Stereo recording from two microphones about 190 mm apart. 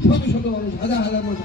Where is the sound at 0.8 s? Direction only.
70° left (ahead or behind).